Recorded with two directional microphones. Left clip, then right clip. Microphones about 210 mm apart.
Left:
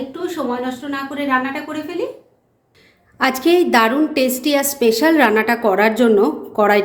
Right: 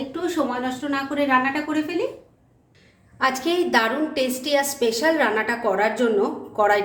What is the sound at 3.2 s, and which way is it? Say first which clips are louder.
A woman's voice: left 6 dB; 40° left (ahead or behind).